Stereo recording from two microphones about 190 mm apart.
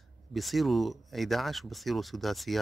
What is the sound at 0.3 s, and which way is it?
Speech, centre (ahead or behind).